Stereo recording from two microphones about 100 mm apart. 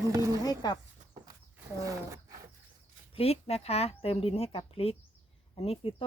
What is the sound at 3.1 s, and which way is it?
Speech, 80° left.